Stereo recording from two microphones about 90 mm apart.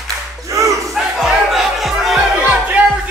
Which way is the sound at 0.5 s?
40° right (ahead or behind).